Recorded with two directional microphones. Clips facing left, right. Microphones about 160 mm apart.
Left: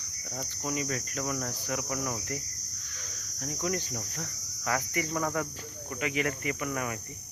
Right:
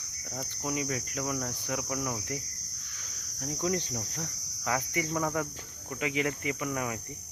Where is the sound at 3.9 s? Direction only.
15° right (ahead or behind).